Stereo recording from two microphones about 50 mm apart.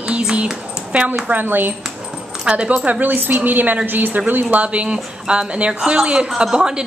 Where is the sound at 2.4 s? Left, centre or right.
Right.